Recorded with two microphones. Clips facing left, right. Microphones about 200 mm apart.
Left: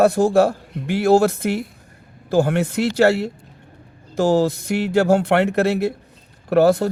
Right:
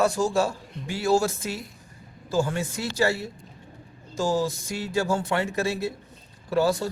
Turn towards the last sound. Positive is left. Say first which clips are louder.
# left 8 dB
turn(degrees=60)  # may be behind; listen again after turning